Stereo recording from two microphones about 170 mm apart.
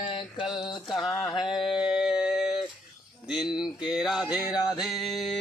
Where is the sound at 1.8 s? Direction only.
5° right (ahead or behind).